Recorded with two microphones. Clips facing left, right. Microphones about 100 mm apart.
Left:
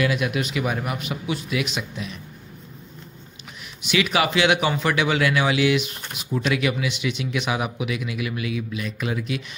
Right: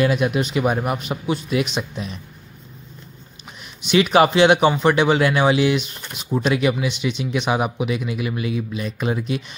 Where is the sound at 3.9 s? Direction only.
35° right (ahead or behind).